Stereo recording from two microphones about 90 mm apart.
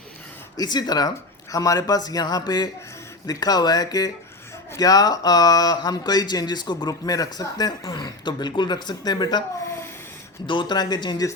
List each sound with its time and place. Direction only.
0.5 s speech: 50° left (ahead or behind)
9.6 s a sound: 30° left (ahead or behind)
10.4 s speech: 65° left (ahead or behind)